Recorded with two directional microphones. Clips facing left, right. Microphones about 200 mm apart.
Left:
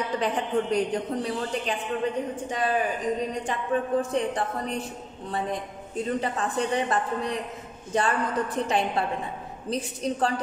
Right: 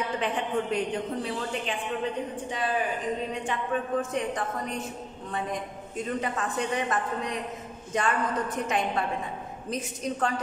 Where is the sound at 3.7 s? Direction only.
35° left (ahead or behind).